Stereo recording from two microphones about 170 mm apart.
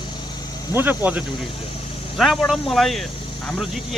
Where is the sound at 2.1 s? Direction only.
Centre (ahead or behind).